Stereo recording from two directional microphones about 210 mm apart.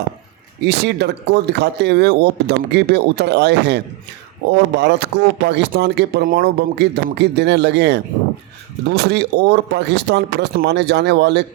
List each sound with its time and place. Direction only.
0.6 s speech: 55° right (ahead or behind)